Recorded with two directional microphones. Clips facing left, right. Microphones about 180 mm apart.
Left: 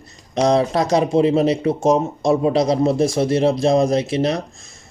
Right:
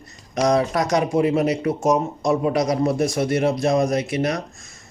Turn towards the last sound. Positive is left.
turn(degrees=25)  # may be behind; listen again after turning